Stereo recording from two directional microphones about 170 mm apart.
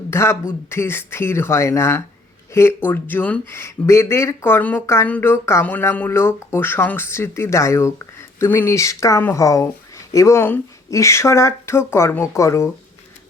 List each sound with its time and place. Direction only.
0.1 s speech: 15° left (ahead or behind)